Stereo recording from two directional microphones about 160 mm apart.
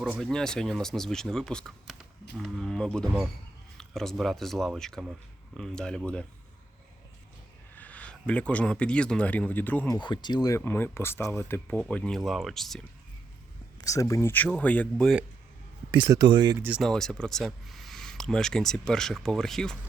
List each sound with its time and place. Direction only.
0.0 s speech: centre (ahead or behind)
7.8 s speech: 10° left (ahead or behind)
9.9 s speech: 25° left (ahead or behind)
10.6 s speech: 10° left (ahead or behind)
13.8 s speech: 20° left (ahead or behind)
15.9 s speech: 25° right (ahead or behind)
16.6 s speech: 10° right (ahead or behind)
16.8 s speech: 5° left (ahead or behind)